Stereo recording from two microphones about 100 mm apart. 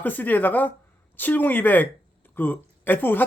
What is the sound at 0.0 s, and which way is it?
A man's voice, 20° left (ahead or behind).